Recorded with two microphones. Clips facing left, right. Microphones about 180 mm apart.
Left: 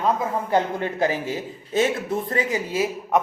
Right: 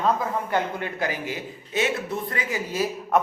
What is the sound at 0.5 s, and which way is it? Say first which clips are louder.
A man's voice: left 4 dB; 30° left (ahead or behind).